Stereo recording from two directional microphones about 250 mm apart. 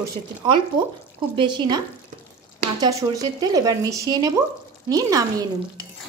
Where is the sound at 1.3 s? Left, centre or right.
Centre.